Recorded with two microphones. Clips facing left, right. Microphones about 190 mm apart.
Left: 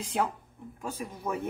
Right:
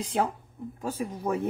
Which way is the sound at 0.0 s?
35° right (ahead or behind).